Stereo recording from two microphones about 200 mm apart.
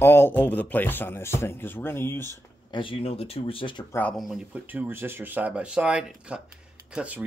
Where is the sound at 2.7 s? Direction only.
25° left (ahead or behind).